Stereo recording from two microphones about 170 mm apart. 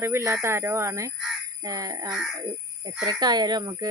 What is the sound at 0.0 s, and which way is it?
Speech, 15° right (ahead or behind).